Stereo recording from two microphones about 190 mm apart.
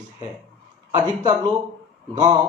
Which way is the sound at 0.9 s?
25° right (ahead or behind).